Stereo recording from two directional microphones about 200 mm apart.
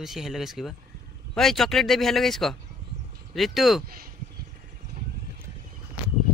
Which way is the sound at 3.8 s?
45° right (ahead or behind).